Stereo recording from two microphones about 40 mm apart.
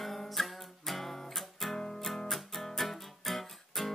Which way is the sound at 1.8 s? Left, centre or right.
Centre.